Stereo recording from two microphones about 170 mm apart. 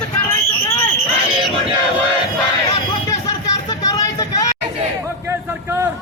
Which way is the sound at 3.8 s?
20° left (ahead or behind).